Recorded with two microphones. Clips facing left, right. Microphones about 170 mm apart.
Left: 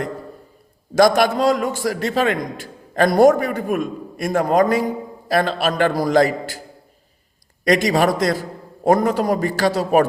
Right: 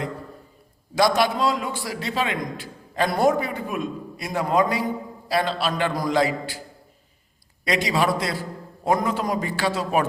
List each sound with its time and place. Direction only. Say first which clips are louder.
0.9 s a man's voice: left 6 dB; 45° left (ahead or behind)
7.7 s a man's voice: left 6 dB; 45° left (ahead or behind)